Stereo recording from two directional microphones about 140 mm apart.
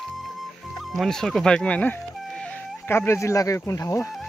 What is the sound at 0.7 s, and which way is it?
Speech, centre (ahead or behind).